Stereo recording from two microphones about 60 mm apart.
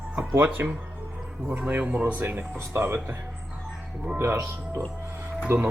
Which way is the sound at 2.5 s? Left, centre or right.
Right.